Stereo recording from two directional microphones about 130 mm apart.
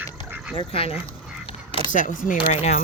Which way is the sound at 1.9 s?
90° left.